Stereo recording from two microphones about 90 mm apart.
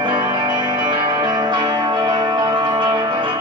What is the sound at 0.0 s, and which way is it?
Music, 60° right (ahead or behind).